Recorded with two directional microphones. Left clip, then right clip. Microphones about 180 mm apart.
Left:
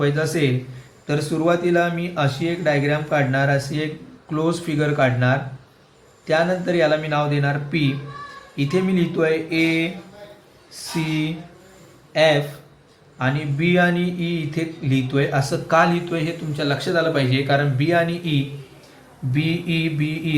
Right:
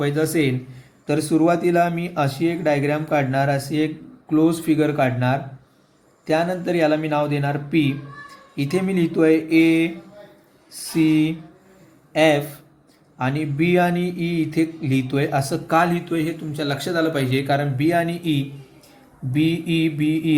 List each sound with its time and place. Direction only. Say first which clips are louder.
0.0 s a man's voice: even; 40° right (ahead or behind)
12.1 s speech: even; 45° right (ahead or behind)